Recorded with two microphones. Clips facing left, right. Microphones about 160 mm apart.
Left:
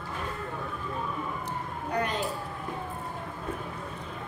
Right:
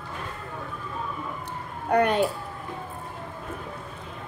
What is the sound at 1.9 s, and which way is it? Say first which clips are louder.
Speech: right 9 dB; 65° right (ahead or behind).